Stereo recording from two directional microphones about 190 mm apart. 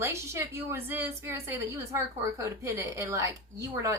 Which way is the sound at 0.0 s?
15° right (ahead or behind).